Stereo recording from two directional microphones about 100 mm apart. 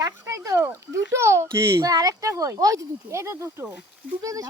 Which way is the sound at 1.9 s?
40° right (ahead or behind).